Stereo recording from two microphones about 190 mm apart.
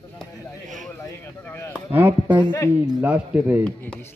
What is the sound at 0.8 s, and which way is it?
Speech, 15° left (ahead or behind).